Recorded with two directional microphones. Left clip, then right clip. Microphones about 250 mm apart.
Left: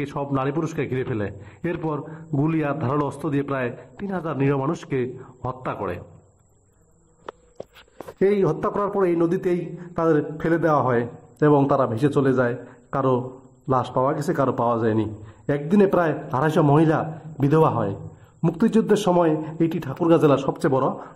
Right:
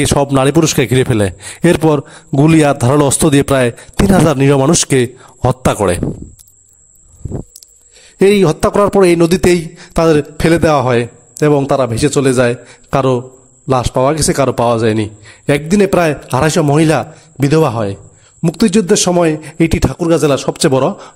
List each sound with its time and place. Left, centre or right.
0.0 s a man's voice: right
8.2 s a man's voice: right
11.3 s a man's voice: right
13.7 s a man's voice: right